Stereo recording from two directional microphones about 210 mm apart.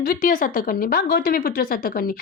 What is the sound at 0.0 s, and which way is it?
Speech, 45° left (ahead or behind).